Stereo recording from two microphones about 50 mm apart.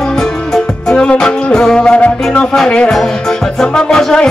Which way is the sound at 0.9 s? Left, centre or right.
Centre.